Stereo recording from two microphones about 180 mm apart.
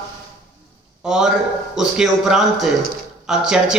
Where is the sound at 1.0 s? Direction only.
5° right (ahead or behind).